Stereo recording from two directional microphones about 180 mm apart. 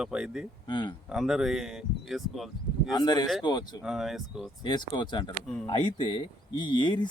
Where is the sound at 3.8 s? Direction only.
Centre (ahead or behind).